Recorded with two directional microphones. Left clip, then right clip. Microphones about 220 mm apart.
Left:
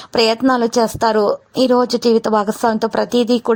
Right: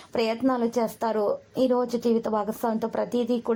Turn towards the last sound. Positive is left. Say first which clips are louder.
# left 10 dB
turn(degrees=35)  # may be behind; listen again after turning